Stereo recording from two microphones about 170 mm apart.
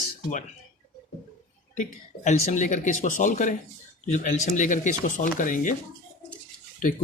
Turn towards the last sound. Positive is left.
turn(degrees=50)  # may be behind; listen again after turning